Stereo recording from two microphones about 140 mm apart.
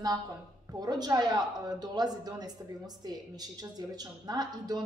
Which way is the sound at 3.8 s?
30° right (ahead or behind).